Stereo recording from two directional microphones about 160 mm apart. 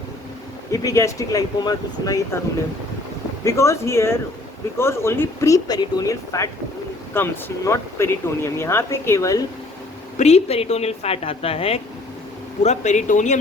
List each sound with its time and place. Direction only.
0.7 s speech: 20° left (ahead or behind)
3.4 s speech: 20° left (ahead or behind)
10.2 s a woman's voice: 40° left (ahead or behind)